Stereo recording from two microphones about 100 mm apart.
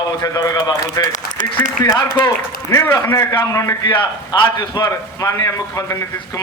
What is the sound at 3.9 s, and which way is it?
A man's voice, 45° left (ahead or behind).